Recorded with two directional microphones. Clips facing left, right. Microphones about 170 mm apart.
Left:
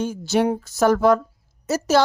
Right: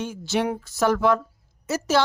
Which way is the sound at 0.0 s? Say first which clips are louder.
Left 5 dB; 40° left (ahead or behind).